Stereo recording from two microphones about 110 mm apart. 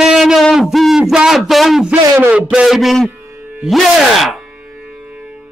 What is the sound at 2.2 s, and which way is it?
A man's voice, 10° right (ahead or behind).